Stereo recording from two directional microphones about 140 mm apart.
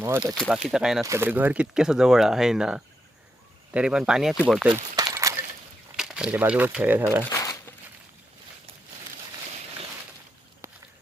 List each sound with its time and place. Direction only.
0.0 s speech: 15° right (ahead or behind)
0.4 s speech: 5° right (ahead or behind)
1.0 s speech: 20° right (ahead or behind)
4.7 s a sound: 25° right (ahead or behind)
6.0 s speech: 5° right (ahead or behind)
7.3 s crumpling: 25° left (ahead or behind)
10.6 s a sound: 20° right (ahead or behind)